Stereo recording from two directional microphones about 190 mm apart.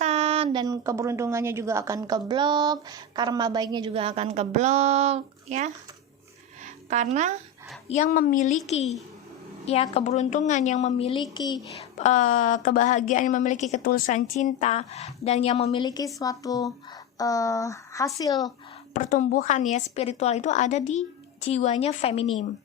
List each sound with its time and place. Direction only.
0.0 s a woman's voice: 35° right (ahead or behind)
6.9 s speech: 35° right (ahead or behind)
7.9 s a woman's voice: 40° left (ahead or behind); by 11.9 s 25° left (ahead or behind)
11.9 s a woman's voice: 40° left (ahead or behind); by 18.3 s 15° left (ahead or behind)
18.9 s a woman's voice: 40° left (ahead or behind)